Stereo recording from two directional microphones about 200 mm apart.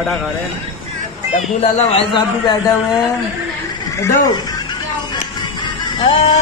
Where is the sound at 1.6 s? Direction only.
30° left (ahead or behind).